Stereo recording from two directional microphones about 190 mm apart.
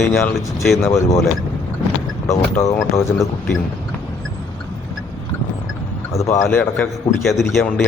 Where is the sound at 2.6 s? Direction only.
15° left (ahead or behind).